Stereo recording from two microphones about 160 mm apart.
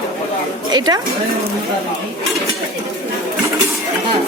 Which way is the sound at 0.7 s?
25° right (ahead or behind).